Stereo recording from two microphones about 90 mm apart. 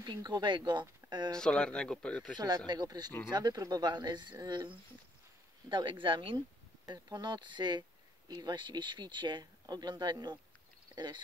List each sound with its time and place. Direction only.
0.0 s speech: 50° right (ahead or behind)
1.3 s speech: 10° left (ahead or behind)
2.3 s speech: 50° right (ahead or behind); by 6.4 s 65° right (ahead or behind)
6.9 s speech: 50° right (ahead or behind)